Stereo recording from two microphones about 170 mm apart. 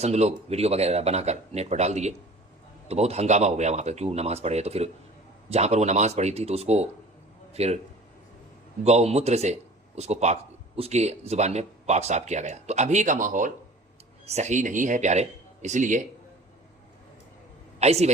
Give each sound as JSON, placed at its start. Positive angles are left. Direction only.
{"t": 0.0, "sound": "speech", "side_deg": -40}
{"t": 8.8, "sound": "speech", "side_deg": -40}
{"t": 17.7, "sound": "speech", "side_deg": -40}